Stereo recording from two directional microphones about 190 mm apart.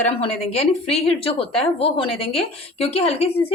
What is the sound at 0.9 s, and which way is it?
A woman's voice, 30° left (ahead or behind).